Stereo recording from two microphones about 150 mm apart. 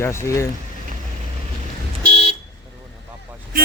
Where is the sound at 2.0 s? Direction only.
40° left (ahead or behind).